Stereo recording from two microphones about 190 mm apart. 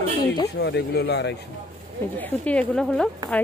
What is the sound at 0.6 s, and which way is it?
Speech, 60° left (ahead or behind).